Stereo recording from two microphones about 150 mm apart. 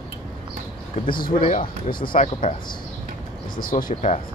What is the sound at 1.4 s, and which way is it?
Speech, 65° left (ahead or behind).